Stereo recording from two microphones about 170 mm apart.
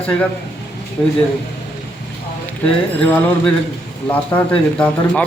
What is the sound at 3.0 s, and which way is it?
Speech, 10° left (ahead or behind).